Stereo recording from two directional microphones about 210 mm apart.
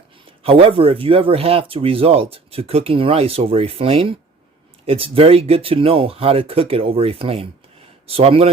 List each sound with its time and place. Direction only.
0.4 s speech: 25° right (ahead or behind)